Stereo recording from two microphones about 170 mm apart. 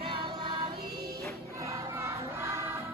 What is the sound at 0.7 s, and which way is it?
Music, 65° right (ahead or behind).